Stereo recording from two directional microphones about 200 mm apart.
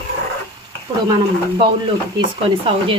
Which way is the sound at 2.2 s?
25° right (ahead or behind).